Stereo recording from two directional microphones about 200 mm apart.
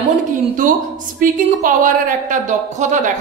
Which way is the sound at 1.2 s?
40° right (ahead or behind).